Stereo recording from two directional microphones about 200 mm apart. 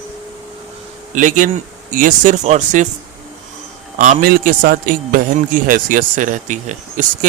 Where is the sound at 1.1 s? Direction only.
40° right (ahead or behind).